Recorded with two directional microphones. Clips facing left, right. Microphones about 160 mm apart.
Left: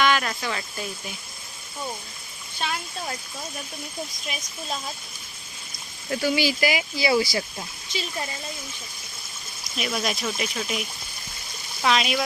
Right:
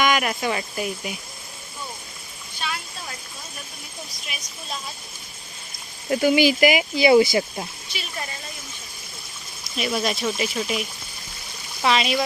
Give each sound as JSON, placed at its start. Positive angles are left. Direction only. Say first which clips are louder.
{"t": 0.0, "sound": "speech", "louder": "right 2 dB", "side_deg": -15}
{"t": 6.1, "sound": "speech", "louder": "right 6 dB", "side_deg": -15}
{"t": 9.7, "sound": "speech", "louder": "right 3 dB", "side_deg": 0}